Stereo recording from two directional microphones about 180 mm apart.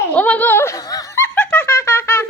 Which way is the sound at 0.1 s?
10° left (ahead or behind).